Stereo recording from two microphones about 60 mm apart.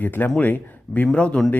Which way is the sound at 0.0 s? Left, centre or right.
Left.